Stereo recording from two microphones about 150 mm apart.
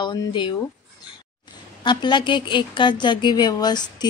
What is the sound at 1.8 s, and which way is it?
Speech, 30° left (ahead or behind).